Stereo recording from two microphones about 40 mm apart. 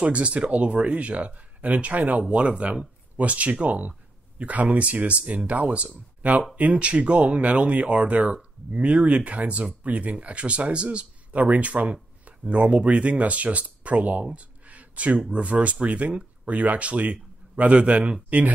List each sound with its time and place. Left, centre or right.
0.0 s speech: right
11.3 s speech: right
14.2 s a sound: right
15.3 s a man's voice: right